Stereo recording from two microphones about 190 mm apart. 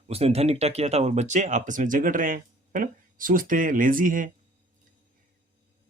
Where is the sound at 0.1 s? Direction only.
30° right (ahead or behind).